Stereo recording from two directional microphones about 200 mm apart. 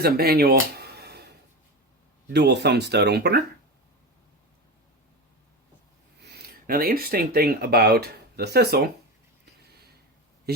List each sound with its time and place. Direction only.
0.0 s speech: 50° right (ahead or behind)
0.8 s a sound: 55° right (ahead or behind)
2.3 s speech: 55° right (ahead or behind)
6.2 s speech: 50° right (ahead or behind)